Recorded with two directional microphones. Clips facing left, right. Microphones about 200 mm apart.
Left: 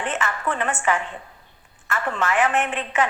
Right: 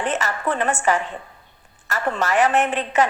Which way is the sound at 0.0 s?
40° right (ahead or behind).